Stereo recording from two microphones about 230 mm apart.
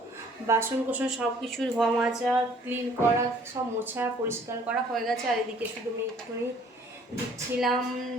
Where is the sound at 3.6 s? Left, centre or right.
Centre.